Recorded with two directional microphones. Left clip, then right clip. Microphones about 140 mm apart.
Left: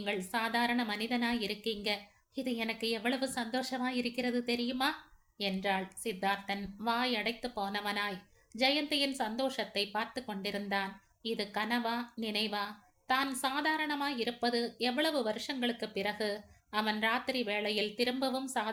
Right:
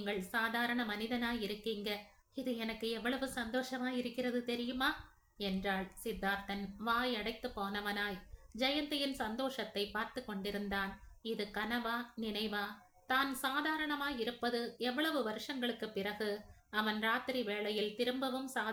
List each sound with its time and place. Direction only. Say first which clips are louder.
0.0 s a woman's voice: left 2 dB; 25° left (ahead or behind)